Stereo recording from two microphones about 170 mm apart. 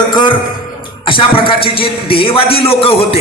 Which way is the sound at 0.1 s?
25° left (ahead or behind).